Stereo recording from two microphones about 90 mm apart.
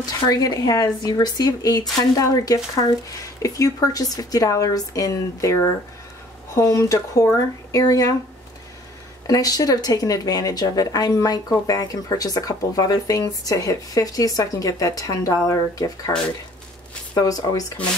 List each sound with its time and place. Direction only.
0.0 s speech: 45° left (ahead or behind)
9.3 s speech: 40° left (ahead or behind)
17.1 s speech: 45° left (ahead or behind)